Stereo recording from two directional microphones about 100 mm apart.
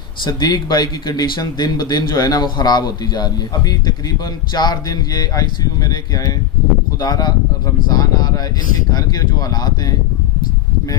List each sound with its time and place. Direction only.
0.2 s speech: 45° left (ahead or behind)